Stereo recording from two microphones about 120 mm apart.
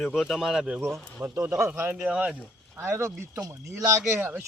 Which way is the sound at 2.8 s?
20° right (ahead or behind).